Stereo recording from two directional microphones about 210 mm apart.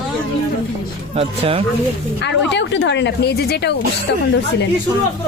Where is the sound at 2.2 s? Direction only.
55° left (ahead or behind).